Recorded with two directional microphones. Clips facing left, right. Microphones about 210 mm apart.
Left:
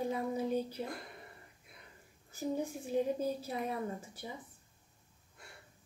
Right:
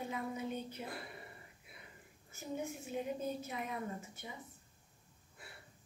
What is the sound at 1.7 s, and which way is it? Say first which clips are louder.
Whispering: right 1 dB; 5° right (ahead or behind).